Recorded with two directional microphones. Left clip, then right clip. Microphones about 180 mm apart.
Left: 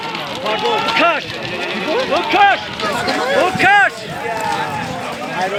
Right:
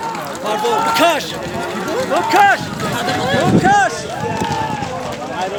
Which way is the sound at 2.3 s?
20° left (ahead or behind).